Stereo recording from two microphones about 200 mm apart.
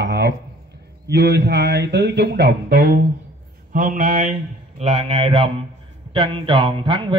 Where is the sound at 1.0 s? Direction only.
55° right (ahead or behind).